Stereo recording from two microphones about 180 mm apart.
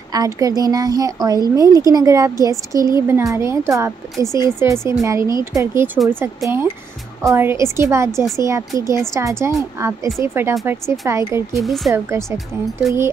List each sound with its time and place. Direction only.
0.1 s a woman's voice: 20° right (ahead or behind)
11.5 s speech: centre (ahead or behind)
11.9 s speech: 15° right (ahead or behind)
12.8 s speech: centre (ahead or behind)